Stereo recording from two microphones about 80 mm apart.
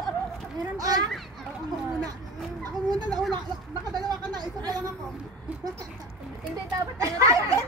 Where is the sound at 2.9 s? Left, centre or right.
Right.